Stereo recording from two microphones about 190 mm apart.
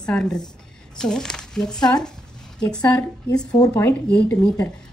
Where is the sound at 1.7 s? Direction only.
20° left (ahead or behind).